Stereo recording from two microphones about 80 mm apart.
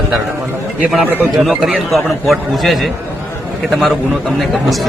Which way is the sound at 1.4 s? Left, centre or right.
Centre.